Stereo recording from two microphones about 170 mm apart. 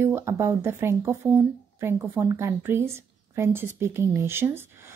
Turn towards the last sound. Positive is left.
turn(degrees=-15)  # may be behind; listen again after turning